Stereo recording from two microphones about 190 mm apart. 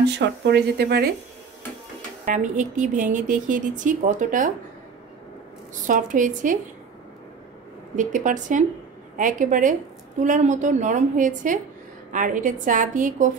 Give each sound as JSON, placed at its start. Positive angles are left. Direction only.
{"t": 0.2, "sound": "speech", "side_deg": -60}
{"t": 2.2, "sound": "a woman's voice", "side_deg": -40}
{"t": 5.9, "sound": "a woman's voice", "side_deg": -45}
{"t": 7.9, "sound": "a woman's voice", "side_deg": -40}